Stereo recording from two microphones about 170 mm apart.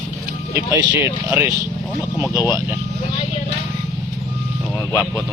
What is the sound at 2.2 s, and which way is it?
Speech, 25° left (ahead or behind).